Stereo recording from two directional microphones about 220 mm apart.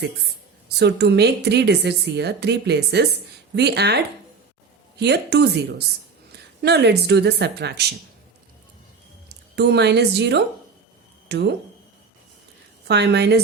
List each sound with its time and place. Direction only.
0.7 s a woman's voice: 50° right (ahead or behind)
9.6 s a woman's voice: 50° right (ahead or behind)
12.9 s a woman's voice: 50° right (ahead or behind)